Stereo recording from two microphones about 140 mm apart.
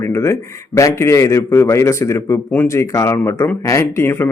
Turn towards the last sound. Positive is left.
turn(degrees=15)  # may be behind; listen again after turning